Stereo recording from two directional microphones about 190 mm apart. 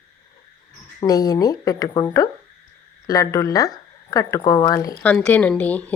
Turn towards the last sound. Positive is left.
turn(degrees=5)  # may be behind; listen again after turning